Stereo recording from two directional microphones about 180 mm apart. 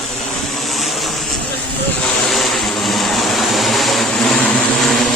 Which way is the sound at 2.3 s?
Centre (ahead or behind).